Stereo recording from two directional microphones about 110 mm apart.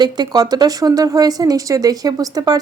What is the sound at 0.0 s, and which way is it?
A woman's voice, 40° right (ahead or behind).